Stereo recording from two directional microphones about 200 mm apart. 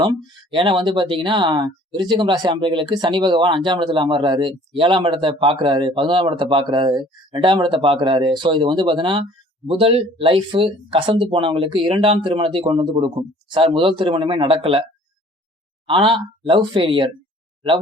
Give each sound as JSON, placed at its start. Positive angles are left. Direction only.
{"t": 0.0, "sound": "speech", "side_deg": -25}
{"t": 15.9, "sound": "speech", "side_deg": -25}